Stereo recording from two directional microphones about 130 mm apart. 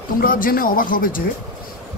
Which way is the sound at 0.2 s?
90° left.